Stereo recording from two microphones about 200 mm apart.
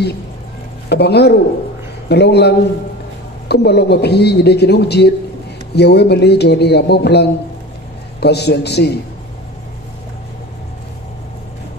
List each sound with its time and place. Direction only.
0.8 s a man's voice: 55° left (ahead or behind)